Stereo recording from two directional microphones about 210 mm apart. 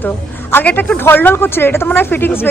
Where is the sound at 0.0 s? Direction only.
10° left (ahead or behind).